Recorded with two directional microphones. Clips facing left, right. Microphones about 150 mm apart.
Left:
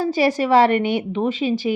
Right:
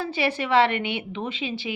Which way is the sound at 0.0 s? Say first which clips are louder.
Left 7 dB; 40° left (ahead or behind).